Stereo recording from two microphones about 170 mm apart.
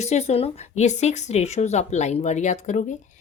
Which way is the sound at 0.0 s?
40° left (ahead or behind).